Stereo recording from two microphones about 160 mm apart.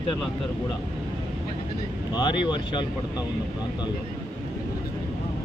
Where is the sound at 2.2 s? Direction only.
30° left (ahead or behind).